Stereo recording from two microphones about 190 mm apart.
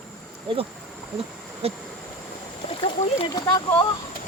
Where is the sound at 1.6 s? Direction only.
30° right (ahead or behind).